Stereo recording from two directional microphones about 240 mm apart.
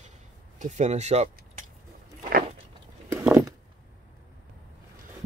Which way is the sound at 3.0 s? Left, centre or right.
Centre.